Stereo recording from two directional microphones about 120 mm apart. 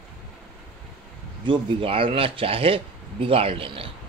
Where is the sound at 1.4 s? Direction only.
45° right (ahead or behind).